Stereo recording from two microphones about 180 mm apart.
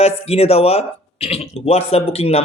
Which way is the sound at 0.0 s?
35° left (ahead or behind).